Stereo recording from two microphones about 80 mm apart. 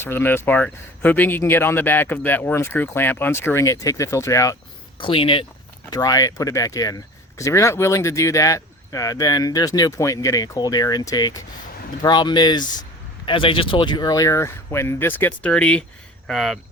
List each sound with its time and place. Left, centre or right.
0.0 s speech: left
4.9 s speech: left
5.9 s speech: left
12.0 s speech: left
13.2 s speech: left; by 15.8 s centre
16.2 s speech: centre